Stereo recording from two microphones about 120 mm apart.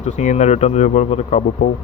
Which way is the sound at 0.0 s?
85° left.